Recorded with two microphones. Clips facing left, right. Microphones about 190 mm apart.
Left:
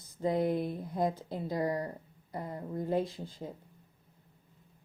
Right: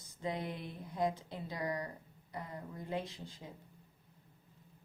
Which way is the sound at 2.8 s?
45° left (ahead or behind).